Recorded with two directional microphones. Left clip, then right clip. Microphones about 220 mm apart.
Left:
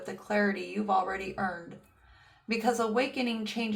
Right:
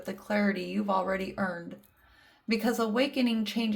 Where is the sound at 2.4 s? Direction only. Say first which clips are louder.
Left 1 dB; 50° right (ahead or behind).